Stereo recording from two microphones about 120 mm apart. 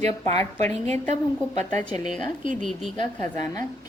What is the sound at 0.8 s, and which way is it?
A woman's voice, 65° right (ahead or behind).